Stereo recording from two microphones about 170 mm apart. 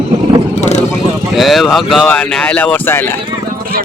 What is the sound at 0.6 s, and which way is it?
Vehicle, 40° left (ahead or behind).